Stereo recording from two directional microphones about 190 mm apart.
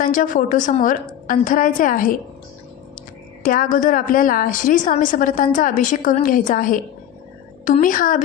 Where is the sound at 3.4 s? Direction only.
45° left (ahead or behind).